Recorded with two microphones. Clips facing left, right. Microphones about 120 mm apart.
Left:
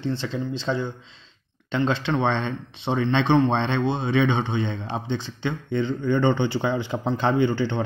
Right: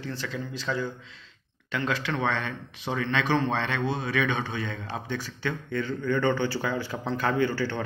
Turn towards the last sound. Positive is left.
turn(degrees=20)  # may be behind; listen again after turning